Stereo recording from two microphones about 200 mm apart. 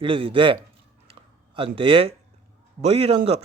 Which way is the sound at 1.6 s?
25° right (ahead or behind).